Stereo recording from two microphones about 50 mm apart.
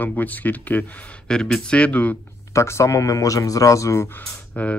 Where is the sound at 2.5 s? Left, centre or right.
Left.